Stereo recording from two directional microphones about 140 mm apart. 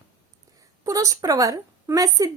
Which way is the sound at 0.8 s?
25° right (ahead or behind).